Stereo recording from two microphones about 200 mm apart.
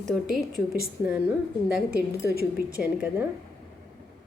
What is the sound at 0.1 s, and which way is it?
A woman's voice, centre (ahead or behind).